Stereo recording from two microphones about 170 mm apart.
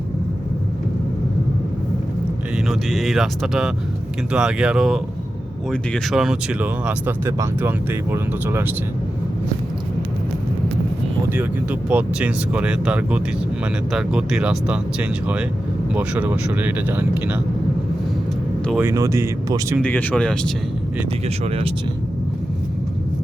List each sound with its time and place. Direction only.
2.6 s speech: centre (ahead or behind)
11.3 s speech: 10° right (ahead or behind)
18.8 s speech: 15° right (ahead or behind)
19.8 s speech: 10° left (ahead or behind)
21.2 s speech: 35° right (ahead or behind)